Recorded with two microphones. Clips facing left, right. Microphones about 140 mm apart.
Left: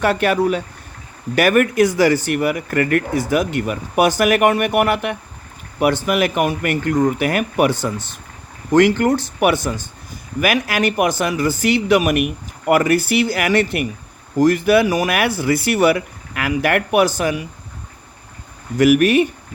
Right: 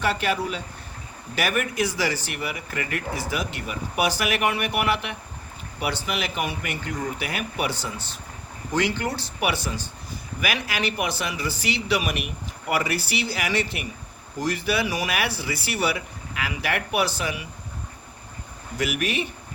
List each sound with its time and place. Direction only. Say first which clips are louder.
0.0 s speech: left 8 dB; 55° left (ahead or behind)
18.8 s speech: left 14 dB; 50° left (ahead or behind)